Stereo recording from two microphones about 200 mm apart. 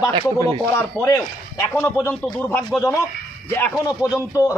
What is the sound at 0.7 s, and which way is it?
A man's voice, 10° left (ahead or behind).